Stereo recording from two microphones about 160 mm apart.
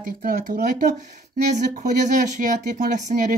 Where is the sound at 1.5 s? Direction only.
50° right (ahead or behind).